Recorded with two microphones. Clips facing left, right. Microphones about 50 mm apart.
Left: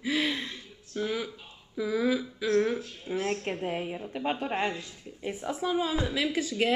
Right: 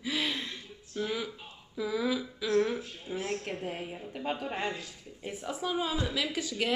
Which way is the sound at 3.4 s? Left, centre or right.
Left.